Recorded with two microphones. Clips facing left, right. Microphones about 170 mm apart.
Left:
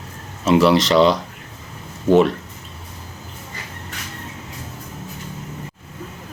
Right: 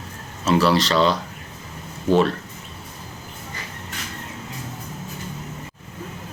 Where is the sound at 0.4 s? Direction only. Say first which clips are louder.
Left 4 dB; 20° left (ahead or behind).